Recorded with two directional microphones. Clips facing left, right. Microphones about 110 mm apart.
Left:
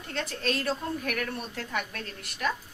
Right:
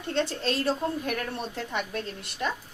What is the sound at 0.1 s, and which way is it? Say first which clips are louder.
A woman's voice: right 4 dB; 30° right (ahead or behind).